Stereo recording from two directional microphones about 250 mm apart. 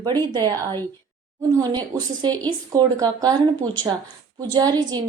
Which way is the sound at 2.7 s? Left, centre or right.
Centre.